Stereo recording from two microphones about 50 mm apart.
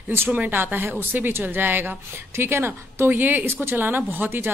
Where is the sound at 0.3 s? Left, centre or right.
Right.